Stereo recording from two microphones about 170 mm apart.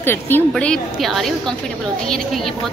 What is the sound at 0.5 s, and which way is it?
Speech, 5° left (ahead or behind).